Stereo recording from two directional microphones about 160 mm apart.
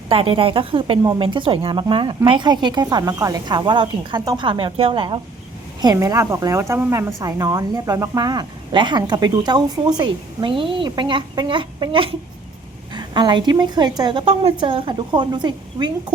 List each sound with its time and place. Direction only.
0.1 s a woman's voice: 35° right (ahead or behind)